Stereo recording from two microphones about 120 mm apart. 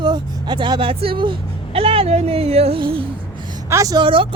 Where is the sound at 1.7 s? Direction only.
50° right (ahead or behind).